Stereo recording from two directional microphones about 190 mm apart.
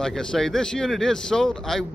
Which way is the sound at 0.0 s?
5° left (ahead or behind).